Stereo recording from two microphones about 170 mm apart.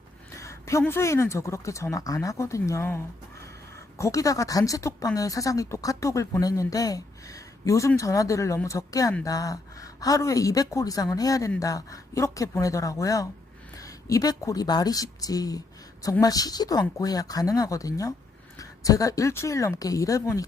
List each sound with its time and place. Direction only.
0.3 s speech: 15° left (ahead or behind)